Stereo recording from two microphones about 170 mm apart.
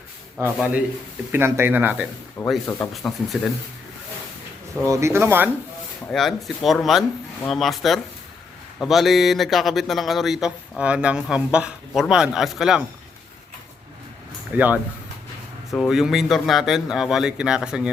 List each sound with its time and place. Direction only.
0.3 s speech: 10° right (ahead or behind)
2.6 s speech: 15° left (ahead or behind)
2.9 s speech: centre (ahead or behind)
4.9 s speech: 15° right (ahead or behind)
6.1 s speech: centre (ahead or behind)
14.5 s speech: 10° right (ahead or behind)